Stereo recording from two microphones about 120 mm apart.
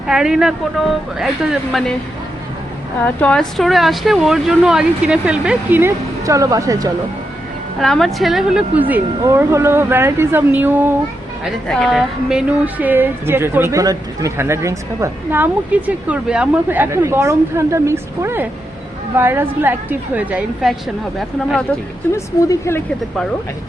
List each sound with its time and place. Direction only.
0.1 s speech: 5° right (ahead or behind)
3.0 s speech: 10° left (ahead or behind); by 5.8 s 5° right (ahead or behind)
5.8 s a woman's voice: 25° right (ahead or behind)
7.8 s a woman's voice: 5° left (ahead or behind); by 10.9 s 15° right (ahead or behind)
11.7 s a woman's voice: centre (ahead or behind)
22.1 s a woman's voice: 25° left (ahead or behind)